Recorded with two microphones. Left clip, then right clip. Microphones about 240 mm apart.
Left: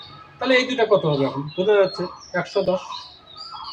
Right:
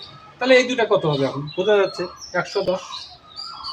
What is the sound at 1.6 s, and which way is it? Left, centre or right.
Speech, right.